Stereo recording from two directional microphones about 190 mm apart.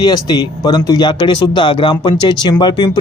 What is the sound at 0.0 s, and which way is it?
A man's voice, 20° left (ahead or behind).